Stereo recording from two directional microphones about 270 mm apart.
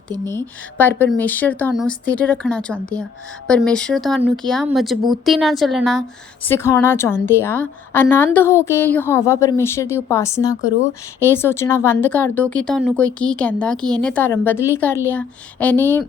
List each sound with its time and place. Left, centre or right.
0.3 s a woman's voice: centre